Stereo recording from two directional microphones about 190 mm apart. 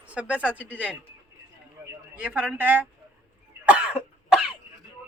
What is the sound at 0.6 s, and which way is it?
Speech, 10° left (ahead or behind).